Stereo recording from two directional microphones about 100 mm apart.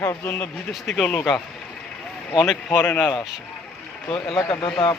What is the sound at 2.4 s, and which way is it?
Speech, 5° right (ahead or behind).